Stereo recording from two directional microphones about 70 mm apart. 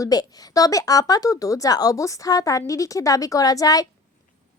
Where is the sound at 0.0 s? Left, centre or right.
Left.